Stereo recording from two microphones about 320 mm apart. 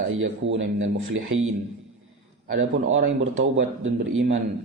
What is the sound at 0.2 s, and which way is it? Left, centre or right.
Speech, right.